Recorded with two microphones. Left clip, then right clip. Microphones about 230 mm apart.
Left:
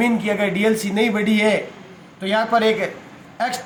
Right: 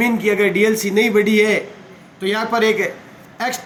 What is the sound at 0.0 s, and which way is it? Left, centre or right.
A man's voice, centre.